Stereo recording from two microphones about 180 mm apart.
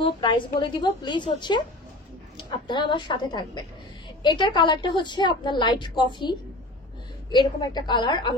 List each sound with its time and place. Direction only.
0.0 s a woman's voice: 25° left (ahead or behind)